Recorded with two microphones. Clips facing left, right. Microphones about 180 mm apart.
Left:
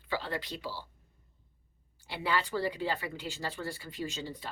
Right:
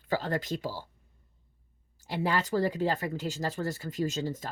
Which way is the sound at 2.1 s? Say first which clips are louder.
Right 4 dB; 45° right (ahead or behind).